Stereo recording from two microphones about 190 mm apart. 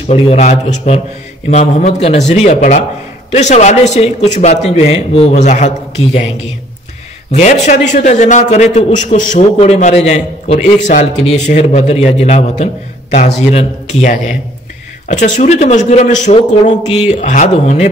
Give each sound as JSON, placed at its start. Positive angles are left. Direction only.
{"t": 0.1, "sound": "a man's voice", "side_deg": 35}
{"t": 7.3, "sound": "a man's voice", "side_deg": 40}